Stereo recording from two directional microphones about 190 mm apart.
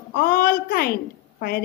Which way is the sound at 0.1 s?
50° left (ahead or behind).